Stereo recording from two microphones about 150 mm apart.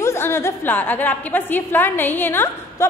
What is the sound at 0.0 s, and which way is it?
A woman's voice, 15° left (ahead or behind).